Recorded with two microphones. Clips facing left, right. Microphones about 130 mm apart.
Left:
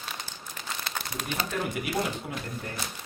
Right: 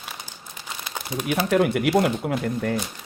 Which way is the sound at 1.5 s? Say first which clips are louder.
Right 14 dB; 70° right (ahead or behind).